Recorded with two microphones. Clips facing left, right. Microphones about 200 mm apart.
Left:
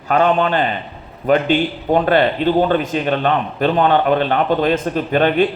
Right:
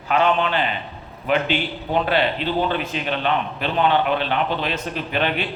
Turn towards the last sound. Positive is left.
turn(degrees=45)  # may be behind; listen again after turning